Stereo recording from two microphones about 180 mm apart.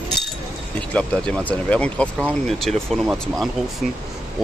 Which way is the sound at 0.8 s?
5° left (ahead or behind).